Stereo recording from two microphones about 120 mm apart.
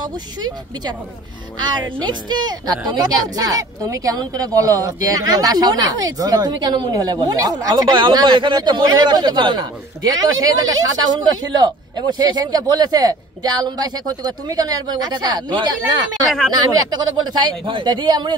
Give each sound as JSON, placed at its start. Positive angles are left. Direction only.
{"t": 0.0, "sound": "a woman's voice", "side_deg": -35}